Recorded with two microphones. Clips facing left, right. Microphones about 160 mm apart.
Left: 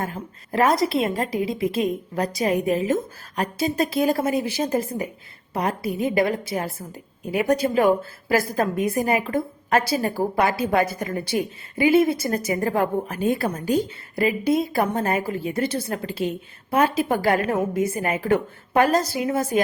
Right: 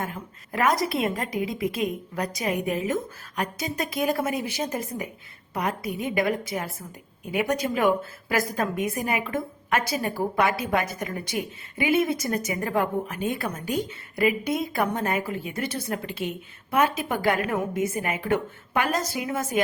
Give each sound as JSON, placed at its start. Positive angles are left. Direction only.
{"t": 0.0, "sound": "a woman's voice", "side_deg": 35}